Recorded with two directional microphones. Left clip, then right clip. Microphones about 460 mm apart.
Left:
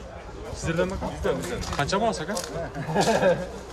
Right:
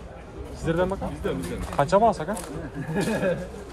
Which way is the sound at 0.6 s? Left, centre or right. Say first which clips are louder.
Right 2 dB; centre.